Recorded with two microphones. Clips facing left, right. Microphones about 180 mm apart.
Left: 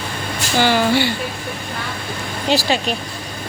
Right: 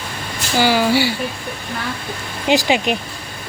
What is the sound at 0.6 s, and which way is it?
Speech, 10° right (ahead or behind).